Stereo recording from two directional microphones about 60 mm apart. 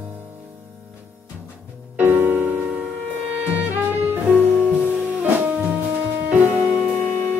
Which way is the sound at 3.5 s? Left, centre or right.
Right.